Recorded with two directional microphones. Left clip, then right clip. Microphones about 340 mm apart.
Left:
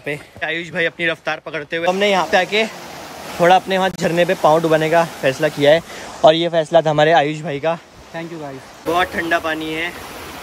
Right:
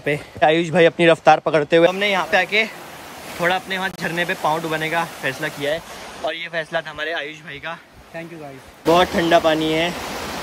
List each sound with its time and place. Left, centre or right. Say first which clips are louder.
0.0 s speech: right 7 dB; centre
1.9 s speech: left 3 dB; centre
8.9 s speech: right 2 dB; centre